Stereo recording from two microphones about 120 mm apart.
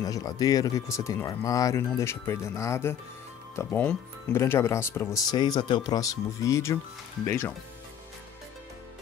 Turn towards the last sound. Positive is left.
turn(degrees=20)  # may be behind; listen again after turning